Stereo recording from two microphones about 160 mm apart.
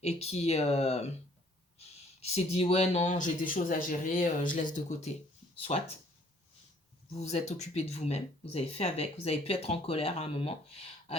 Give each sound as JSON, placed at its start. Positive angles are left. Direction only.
{"t": 0.0, "sound": "speech", "side_deg": 40}
{"t": 7.1, "sound": "speech", "side_deg": 40}